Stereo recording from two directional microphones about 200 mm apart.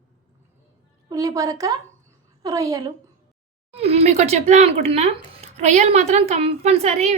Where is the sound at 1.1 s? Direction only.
15° right (ahead or behind).